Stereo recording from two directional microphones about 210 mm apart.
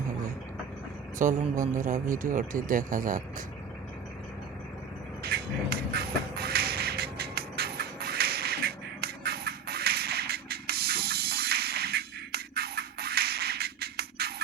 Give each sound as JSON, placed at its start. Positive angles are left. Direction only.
{"t": 1.2, "sound": "speech", "side_deg": -35}
{"t": 5.2, "sound": "beatboxing", "side_deg": -50}